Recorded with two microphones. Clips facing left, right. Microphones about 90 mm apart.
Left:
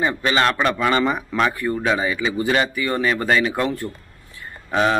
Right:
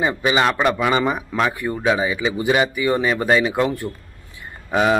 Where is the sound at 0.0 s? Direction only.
10° right (ahead or behind).